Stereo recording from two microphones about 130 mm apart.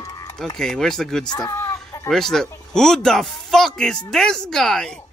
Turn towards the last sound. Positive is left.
turn(degrees=5)  # may be behind; listen again after turning